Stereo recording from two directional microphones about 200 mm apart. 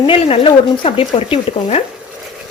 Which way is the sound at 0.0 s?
25° left (ahead or behind).